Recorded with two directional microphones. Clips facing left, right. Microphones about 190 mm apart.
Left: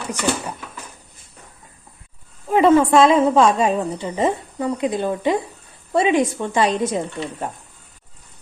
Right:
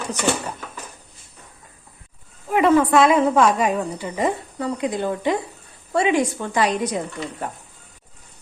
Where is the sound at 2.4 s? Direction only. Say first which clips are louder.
Left 2 dB; 25° left (ahead or behind).